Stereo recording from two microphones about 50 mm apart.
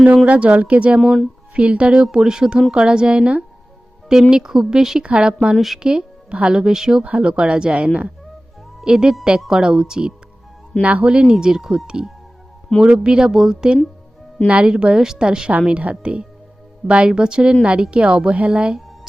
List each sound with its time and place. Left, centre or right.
0.3 s a woman's voice: right
5.5 s speech: centre
5.8 s a woman's voice: centre
8.8 s a woman's voice: centre
10.8 s a woman's voice: right
11.2 s a woman's voice: centre